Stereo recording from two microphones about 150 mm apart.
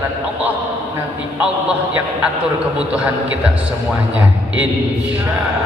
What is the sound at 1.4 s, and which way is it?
A man's voice, 10° right (ahead or behind).